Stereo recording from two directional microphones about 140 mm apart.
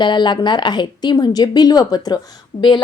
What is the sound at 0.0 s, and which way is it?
A woman's voice, 35° left (ahead or behind).